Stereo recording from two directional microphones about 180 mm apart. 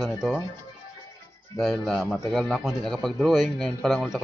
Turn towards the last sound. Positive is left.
turn(degrees=0)  # may be behind; listen again after turning